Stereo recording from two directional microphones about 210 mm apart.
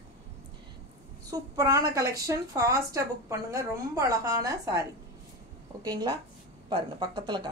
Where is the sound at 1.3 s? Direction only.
15° right (ahead or behind).